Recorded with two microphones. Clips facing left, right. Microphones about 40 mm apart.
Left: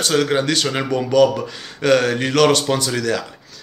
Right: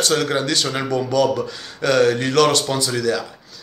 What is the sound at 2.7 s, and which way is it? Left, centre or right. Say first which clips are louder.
Speech: left 1 dB; left.